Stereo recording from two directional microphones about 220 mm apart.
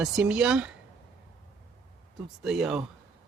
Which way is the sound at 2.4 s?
Centre (ahead or behind).